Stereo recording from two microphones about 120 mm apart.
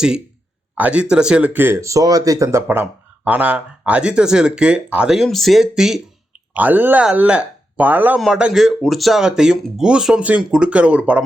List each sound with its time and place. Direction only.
0.8 s speech: 10° right (ahead or behind)
6.5 s speech: 15° right (ahead or behind)